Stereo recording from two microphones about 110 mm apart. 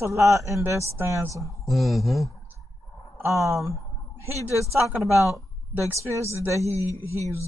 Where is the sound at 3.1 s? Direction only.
25° right (ahead or behind).